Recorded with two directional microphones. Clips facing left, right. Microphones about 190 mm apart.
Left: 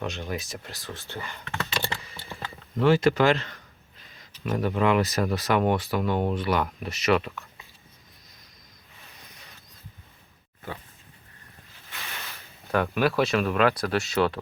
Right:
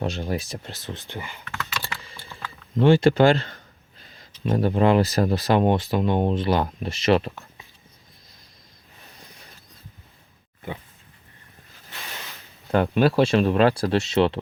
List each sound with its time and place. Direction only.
0.0 s speech: 35° right (ahead or behind); by 1.4 s 15° right (ahead or behind)
1.5 s computer keyboard: 30° left (ahead or behind)
2.7 s speech: 25° right (ahead or behind)
12.7 s speech: 30° right (ahead or behind)